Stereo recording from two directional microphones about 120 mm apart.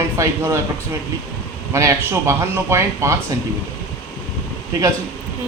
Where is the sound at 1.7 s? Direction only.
25° right (ahead or behind).